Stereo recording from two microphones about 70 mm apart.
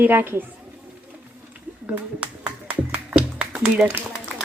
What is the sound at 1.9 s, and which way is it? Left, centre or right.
Music, right.